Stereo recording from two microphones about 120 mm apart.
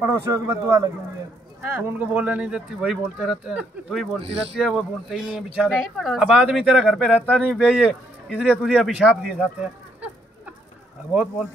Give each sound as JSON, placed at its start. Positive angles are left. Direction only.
{"t": 0.0, "sound": "speech", "side_deg": -20}
{"t": 4.2, "sound": "speech", "side_deg": -55}
{"t": 4.6, "sound": "speech", "side_deg": -5}